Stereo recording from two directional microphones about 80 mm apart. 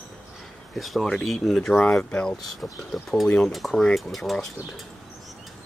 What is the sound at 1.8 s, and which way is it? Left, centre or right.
Speech, centre.